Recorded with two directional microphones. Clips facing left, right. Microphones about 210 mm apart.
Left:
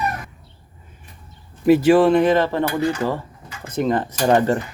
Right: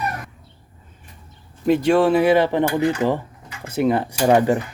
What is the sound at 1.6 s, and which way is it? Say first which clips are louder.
Speech: left 3 dB; 5° left (ahead or behind).